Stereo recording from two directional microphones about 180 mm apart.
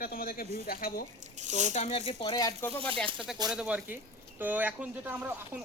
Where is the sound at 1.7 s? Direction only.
35° left (ahead or behind).